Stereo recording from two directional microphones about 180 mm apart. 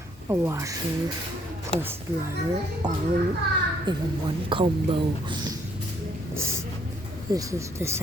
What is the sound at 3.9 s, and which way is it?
Speech, 25° right (ahead or behind).